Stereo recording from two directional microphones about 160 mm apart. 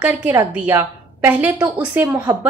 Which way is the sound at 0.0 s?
10° right (ahead or behind).